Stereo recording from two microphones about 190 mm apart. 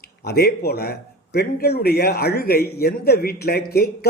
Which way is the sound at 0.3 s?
55° left (ahead or behind).